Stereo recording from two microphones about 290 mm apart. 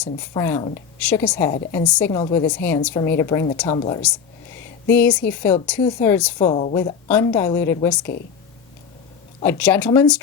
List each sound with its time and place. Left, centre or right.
0.0 s a woman's voice: centre
4.9 s a woman's voice: centre
6.5 s a woman's voice: centre
7.1 s a woman's voice: centre
9.4 s a woman's voice: centre